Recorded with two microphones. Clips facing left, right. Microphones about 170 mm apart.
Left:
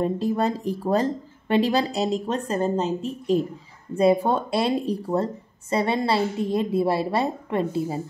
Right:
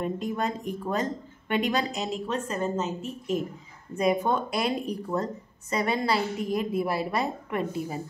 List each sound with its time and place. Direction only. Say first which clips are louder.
0.0 s speech: left 6 dB; 35° left (ahead or behind)